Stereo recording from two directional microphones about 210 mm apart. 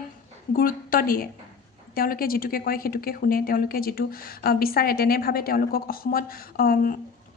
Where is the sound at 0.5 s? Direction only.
45° left (ahead or behind).